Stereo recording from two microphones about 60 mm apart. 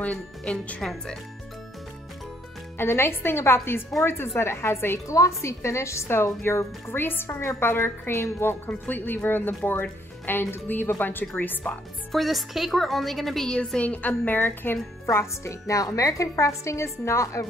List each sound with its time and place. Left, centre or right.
0.0 s a woman's voice: left
2.8 s speech: left
5.0 s speech: left
7.0 s a woman's voice: left
12.1 s a woman's voice: centre
13.7 s a woman's voice: left
15.0 s a woman's voice: left